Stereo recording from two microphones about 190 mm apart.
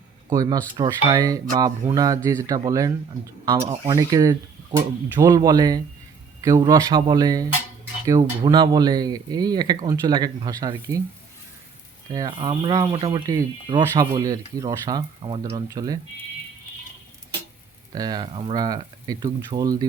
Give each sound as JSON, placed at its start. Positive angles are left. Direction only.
{"t": 0.3, "sound": "speech", "side_deg": -20}
{"t": 12.1, "sound": "speech", "side_deg": -25}
{"t": 17.9, "sound": "speech", "side_deg": -20}